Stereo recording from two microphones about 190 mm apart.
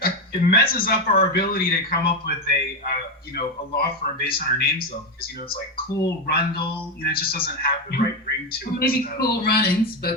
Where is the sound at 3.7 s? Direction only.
55° left (ahead or behind).